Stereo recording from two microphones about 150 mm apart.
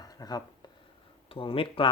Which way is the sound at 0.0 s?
25° left (ahead or behind).